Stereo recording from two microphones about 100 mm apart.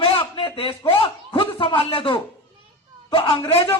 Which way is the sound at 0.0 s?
60° left (ahead or behind).